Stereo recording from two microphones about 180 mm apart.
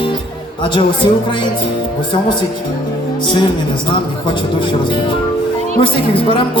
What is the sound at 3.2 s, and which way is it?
Speech, 25° left (ahead or behind).